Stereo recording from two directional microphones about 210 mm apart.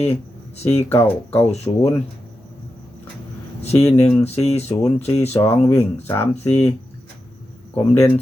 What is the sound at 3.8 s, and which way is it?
Speech, 15° left (ahead or behind).